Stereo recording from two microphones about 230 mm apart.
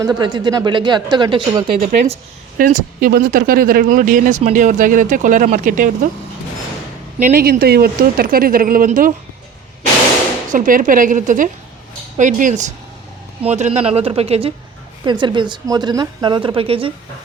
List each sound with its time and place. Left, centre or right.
0.0 s a woman's voice: centre
2.6 s speech: right
7.2 s speech: right
10.5 s a woman's voice: right